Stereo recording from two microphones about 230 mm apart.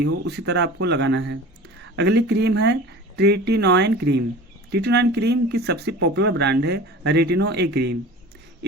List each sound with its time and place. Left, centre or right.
0.0 s speech: right